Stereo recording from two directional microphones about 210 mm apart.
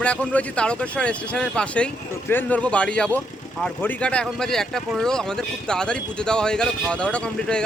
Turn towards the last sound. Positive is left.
turn(degrees=5)  # may be behind; listen again after turning